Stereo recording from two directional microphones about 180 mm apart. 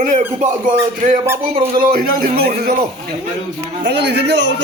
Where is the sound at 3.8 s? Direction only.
70° right (ahead or behind).